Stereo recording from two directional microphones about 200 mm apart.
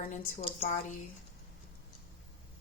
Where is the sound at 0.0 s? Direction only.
35° left (ahead or behind).